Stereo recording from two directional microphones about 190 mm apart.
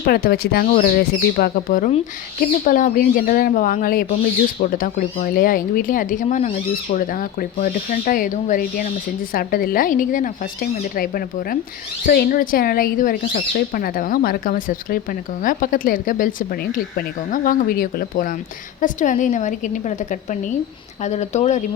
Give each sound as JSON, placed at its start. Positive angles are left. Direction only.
{"t": 0.0, "sound": "a woman's voice", "side_deg": 55}